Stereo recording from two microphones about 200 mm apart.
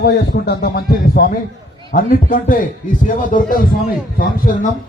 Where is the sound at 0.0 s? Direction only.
50° left (ahead or behind).